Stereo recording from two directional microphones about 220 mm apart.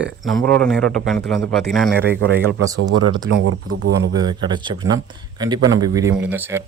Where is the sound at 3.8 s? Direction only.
55° right (ahead or behind).